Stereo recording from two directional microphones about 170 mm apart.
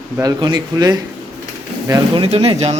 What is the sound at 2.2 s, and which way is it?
Speech, 35° right (ahead or behind).